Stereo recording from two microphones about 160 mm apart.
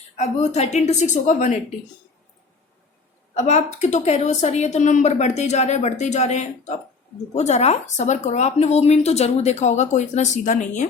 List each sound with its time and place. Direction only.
0.2 s speech: 45° left (ahead or behind)
3.3 s speech: 45° left (ahead or behind)